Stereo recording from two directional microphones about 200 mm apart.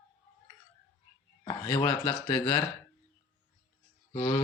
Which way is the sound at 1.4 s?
25° left (ahead or behind).